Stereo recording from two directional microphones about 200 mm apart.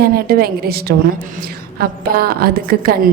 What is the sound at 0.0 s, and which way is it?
A woman's voice, 50° right (ahead or behind).